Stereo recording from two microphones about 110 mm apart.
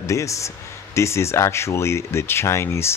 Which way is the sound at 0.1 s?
30° left (ahead or behind).